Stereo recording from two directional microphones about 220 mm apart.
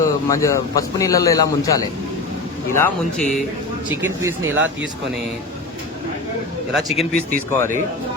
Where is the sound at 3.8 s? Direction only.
10° right (ahead or behind).